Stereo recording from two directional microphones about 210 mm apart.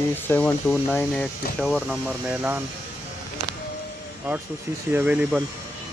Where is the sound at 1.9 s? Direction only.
5° right (ahead or behind).